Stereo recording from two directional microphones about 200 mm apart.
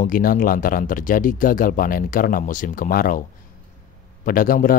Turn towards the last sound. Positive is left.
turn(degrees=45)  # may be behind; listen again after turning